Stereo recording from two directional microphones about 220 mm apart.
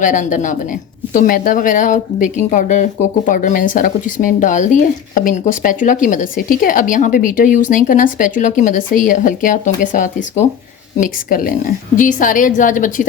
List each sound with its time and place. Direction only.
0.0 s speech: 35° left (ahead or behind)